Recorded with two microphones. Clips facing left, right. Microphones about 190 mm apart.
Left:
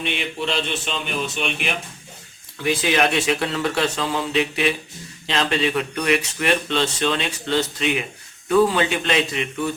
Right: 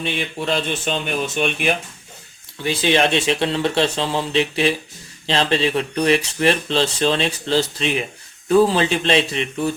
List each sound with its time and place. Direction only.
0.0 s speech: 45° right (ahead or behind)
2.6 s speech: 30° right (ahead or behind)